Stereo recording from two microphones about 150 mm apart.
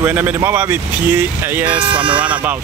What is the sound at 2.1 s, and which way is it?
Speech, 10° right (ahead or behind).